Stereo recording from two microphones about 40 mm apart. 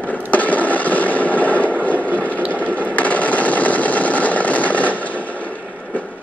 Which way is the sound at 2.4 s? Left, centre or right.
Right.